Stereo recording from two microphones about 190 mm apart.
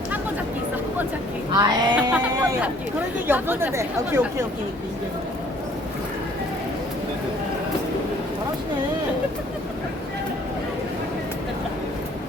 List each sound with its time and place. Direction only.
1.5 s speech: 20° right (ahead or behind)
2.1 s speech: 5° right (ahead or behind)